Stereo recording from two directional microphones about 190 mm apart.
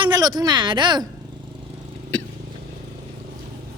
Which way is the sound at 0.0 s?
20° right (ahead or behind).